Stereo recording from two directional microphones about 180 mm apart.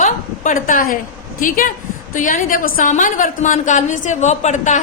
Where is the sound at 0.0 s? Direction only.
45° left (ahead or behind).